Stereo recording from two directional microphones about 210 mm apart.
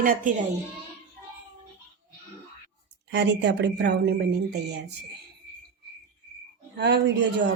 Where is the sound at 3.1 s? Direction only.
55° right (ahead or behind).